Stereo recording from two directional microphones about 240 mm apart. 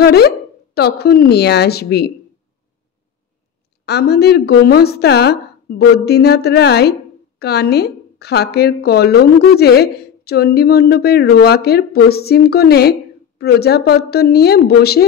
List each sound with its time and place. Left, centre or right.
0.0 s a woman's voice: left
3.8 s a woman's voice: left